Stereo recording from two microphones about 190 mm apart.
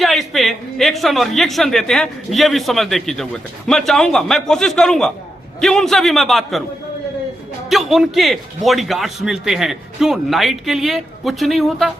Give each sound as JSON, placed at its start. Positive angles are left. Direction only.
{"t": 0.0, "sound": "a man's voice", "side_deg": 0}
{"t": 7.7, "sound": "a man's voice", "side_deg": 0}